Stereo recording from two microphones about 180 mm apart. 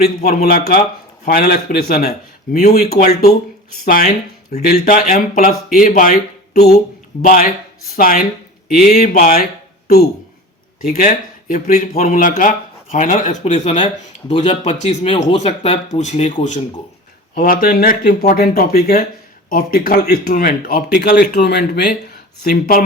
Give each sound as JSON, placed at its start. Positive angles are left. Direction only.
{"t": 0.0, "sound": "speech", "side_deg": 60}
{"t": 2.5, "sound": "speech", "side_deg": 45}
{"t": 4.7, "sound": "speech", "side_deg": 50}
{"t": 7.9, "sound": "speech", "side_deg": 50}
{"t": 17.3, "sound": "speech", "side_deg": 55}
{"t": 22.4, "sound": "speech", "side_deg": 55}